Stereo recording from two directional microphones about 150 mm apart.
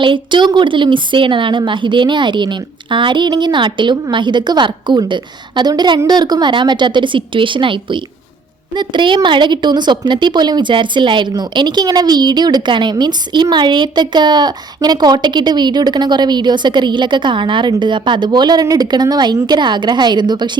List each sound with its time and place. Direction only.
0.0 s a woman's voice: 30° right (ahead or behind)